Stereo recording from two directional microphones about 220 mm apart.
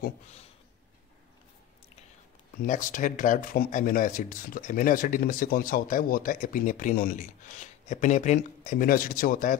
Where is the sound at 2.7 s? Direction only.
35° left (ahead or behind).